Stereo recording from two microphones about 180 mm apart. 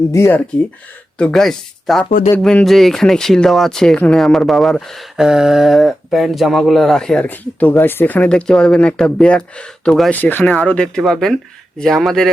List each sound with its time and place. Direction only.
0.1 s speech: 15° left (ahead or behind)
1.2 s speech: centre (ahead or behind)
2.0 s speech: 45° left (ahead or behind)
2.3 s speech: 5° left (ahead or behind)